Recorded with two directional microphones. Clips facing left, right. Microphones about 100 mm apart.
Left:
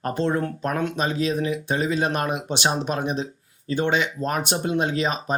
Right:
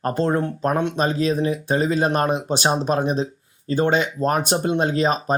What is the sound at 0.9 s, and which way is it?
Speech, 40° right (ahead or behind).